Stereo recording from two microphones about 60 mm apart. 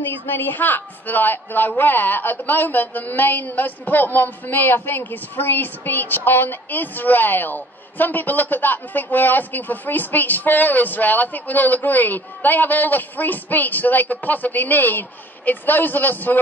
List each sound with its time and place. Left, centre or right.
0.3 s a man's voice: left